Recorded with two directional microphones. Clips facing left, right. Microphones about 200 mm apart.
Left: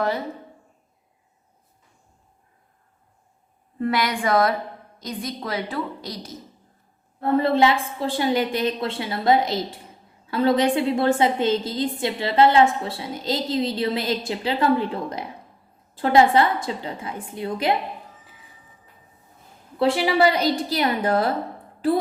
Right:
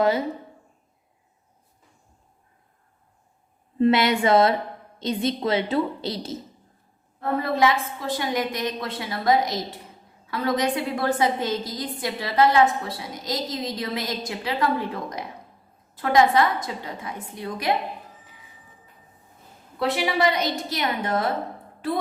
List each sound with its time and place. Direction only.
0.0 s a woman's voice: 20° right (ahead or behind)
3.8 s a woman's voice: 25° right (ahead or behind)
7.2 s a woman's voice: 30° left (ahead or behind)
19.8 s a woman's voice: 30° left (ahead or behind)